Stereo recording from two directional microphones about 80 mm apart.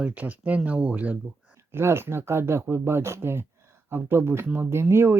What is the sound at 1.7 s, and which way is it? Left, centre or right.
Speech, right.